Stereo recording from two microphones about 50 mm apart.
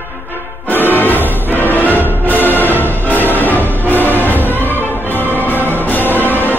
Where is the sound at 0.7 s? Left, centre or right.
Left.